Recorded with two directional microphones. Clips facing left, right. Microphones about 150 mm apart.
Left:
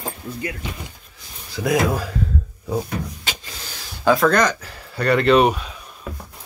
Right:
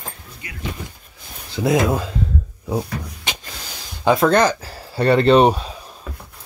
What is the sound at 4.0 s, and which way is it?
Speech, 25° right (ahead or behind).